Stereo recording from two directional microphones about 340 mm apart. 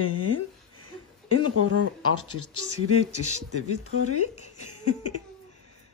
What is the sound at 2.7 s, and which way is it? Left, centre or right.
Speech, left.